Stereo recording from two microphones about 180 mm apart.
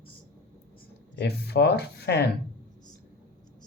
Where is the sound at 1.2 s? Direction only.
65° left (ahead or behind).